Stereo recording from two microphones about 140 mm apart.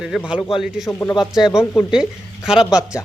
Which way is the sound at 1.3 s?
5° right (ahead or behind).